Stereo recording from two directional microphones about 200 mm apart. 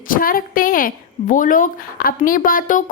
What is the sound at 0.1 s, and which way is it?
A woman's voice, 45° left (ahead or behind).